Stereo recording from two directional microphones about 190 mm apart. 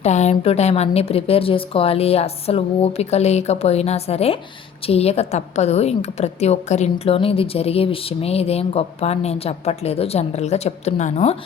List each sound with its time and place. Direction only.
0.0 s a woman's voice: 35° left (ahead or behind)